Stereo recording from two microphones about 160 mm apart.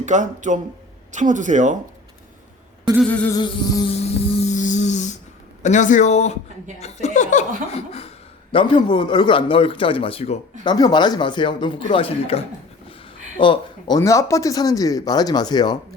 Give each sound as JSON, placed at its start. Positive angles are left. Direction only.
{"t": 0.0, "sound": "speech", "side_deg": -50}
{"t": 3.0, "sound": "a sound", "side_deg": 10}
{"t": 3.3, "sound": "speech", "side_deg": 25}
{"t": 4.4, "sound": "a sound", "side_deg": 50}
{"t": 5.6, "sound": "speech", "side_deg": 50}
{"t": 10.6, "sound": "speech", "side_deg": 25}